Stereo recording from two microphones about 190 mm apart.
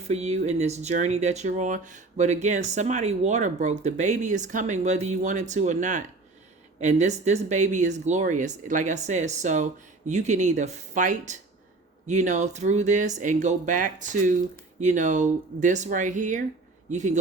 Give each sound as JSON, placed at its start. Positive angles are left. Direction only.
{"t": 0.1, "sound": "speech", "side_deg": -35}